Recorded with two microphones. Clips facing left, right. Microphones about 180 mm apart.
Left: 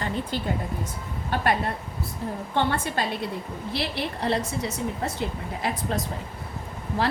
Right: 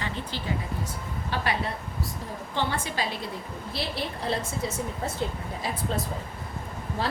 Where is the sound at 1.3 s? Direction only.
50° left (ahead or behind).